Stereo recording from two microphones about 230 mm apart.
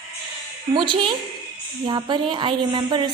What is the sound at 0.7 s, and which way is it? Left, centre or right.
A woman's voice, right.